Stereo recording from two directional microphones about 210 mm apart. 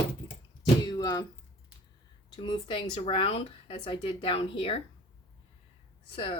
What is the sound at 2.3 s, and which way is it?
Speech, 25° left (ahead or behind).